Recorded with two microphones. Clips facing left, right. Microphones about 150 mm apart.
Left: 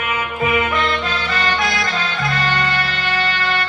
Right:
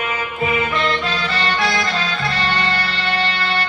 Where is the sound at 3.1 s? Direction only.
35° right (ahead or behind).